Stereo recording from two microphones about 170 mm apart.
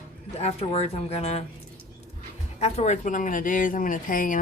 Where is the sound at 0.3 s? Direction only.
35° left (ahead or behind).